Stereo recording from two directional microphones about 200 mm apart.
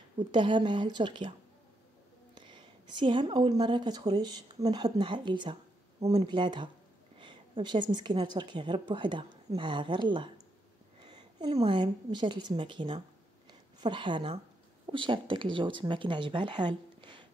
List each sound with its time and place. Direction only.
0.2 s a woman's voice: 25° right (ahead or behind)
2.3 s a woman's voice: 25° right (ahead or behind)
13.5 s a sound: 25° right (ahead or behind)
14.9 s a woman's voice: 25° right (ahead or behind)